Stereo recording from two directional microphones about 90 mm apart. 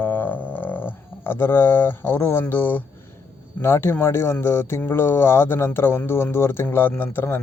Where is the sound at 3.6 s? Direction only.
25° left (ahead or behind).